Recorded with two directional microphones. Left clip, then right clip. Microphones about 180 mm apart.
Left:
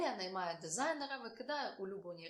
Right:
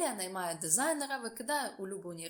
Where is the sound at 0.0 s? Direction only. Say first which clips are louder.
Right 3 dB; 20° right (ahead or behind).